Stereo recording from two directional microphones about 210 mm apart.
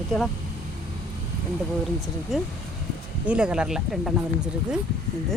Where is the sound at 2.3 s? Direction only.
Centre (ahead or behind).